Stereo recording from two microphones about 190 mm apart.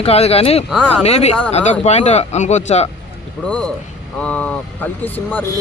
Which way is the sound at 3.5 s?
5° left (ahead or behind).